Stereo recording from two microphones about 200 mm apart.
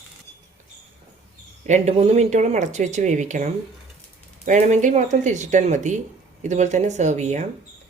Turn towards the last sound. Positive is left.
turn(degrees=-35)  # may be behind; listen again after turning